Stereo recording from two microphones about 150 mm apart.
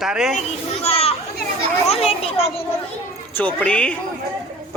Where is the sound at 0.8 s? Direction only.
45° left (ahead or behind).